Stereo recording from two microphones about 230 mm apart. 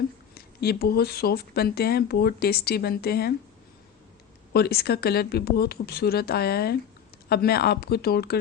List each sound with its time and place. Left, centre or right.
0.3 s speech: left
4.5 s speech: left